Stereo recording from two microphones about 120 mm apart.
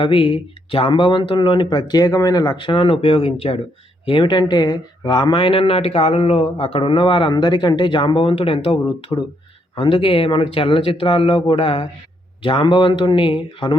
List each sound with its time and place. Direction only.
0.0 s speech: 45° left (ahead or behind)